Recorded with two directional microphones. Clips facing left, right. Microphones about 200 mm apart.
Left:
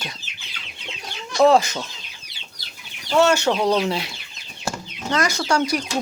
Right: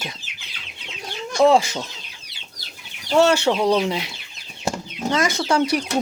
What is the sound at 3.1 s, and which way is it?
Speech, 35° right (ahead or behind).